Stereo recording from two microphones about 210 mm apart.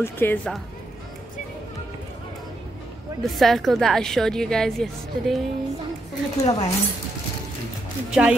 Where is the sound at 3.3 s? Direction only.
Centre (ahead or behind).